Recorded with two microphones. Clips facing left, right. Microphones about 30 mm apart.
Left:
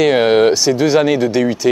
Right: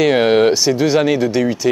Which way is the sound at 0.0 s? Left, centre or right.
Centre.